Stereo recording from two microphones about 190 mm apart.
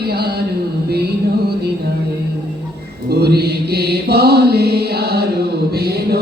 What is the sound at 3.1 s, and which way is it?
Mantra, 60° right (ahead or behind).